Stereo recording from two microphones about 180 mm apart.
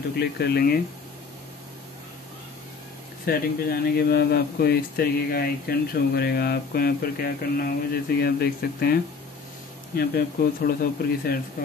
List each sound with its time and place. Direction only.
0.4 s speech: 60° left (ahead or behind)
3.3 s speech: 55° left (ahead or behind)
9.9 s speech: 60° left (ahead or behind)